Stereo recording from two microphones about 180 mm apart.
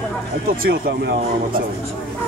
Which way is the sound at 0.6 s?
60° right (ahead or behind).